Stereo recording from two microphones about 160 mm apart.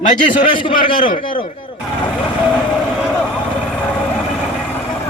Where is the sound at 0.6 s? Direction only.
35° left (ahead or behind).